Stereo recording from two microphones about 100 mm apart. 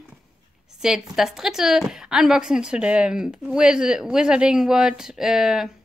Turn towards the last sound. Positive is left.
turn(degrees=-5)  # may be behind; listen again after turning